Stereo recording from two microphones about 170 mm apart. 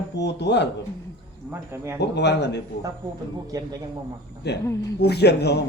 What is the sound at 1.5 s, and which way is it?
Speech, 15° right (ahead or behind).